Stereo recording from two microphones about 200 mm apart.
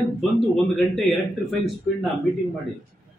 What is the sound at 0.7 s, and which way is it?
Speech, centre (ahead or behind).